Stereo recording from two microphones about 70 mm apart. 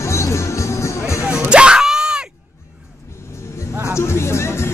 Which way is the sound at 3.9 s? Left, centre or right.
Left.